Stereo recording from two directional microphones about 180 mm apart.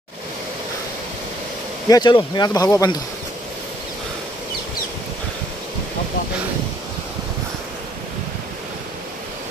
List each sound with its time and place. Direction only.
1.9 s speech: 20° left (ahead or behind)